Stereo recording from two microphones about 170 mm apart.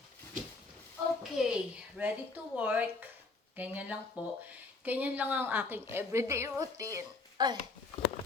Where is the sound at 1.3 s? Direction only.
5° right (ahead or behind).